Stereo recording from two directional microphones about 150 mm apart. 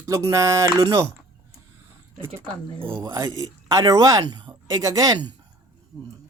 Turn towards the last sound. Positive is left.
turn(degrees=-25)  # may be behind; listen again after turning